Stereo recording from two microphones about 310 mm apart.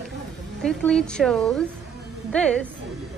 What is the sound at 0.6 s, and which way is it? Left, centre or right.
A woman's voice, centre.